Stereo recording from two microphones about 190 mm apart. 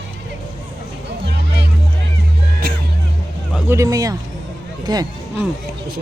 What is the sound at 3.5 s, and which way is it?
A man's voice, 10° right (ahead or behind).